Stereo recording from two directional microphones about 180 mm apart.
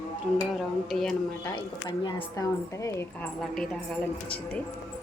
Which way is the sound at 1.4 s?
25° left (ahead or behind).